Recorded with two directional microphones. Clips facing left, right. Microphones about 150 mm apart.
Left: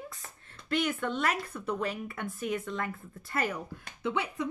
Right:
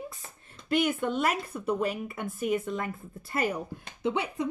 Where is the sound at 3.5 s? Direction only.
25° right (ahead or behind).